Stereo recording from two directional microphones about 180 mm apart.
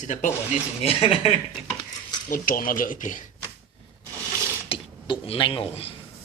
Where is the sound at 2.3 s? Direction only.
50° left (ahead or behind).